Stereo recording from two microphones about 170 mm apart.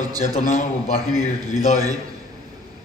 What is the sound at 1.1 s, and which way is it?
Speech, 20° right (ahead or behind).